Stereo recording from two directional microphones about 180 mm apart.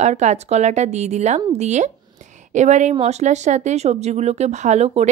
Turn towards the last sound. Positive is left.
turn(degrees=-35)  # may be behind; listen again after turning